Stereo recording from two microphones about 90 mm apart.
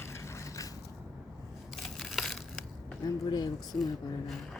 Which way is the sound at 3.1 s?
50° left (ahead or behind).